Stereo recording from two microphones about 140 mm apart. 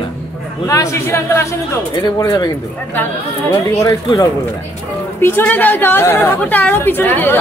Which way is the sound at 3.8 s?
25° left (ahead or behind).